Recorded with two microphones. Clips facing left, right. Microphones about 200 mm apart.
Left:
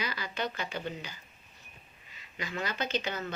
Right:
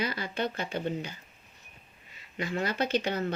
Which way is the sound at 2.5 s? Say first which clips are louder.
Right 5 dB; 30° right (ahead or behind).